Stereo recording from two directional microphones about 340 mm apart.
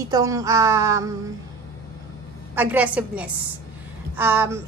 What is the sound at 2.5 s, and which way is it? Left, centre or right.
A woman's voice, centre.